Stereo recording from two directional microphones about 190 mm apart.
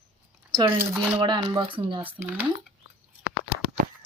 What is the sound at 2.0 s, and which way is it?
Dishes, 10° right (ahead or behind).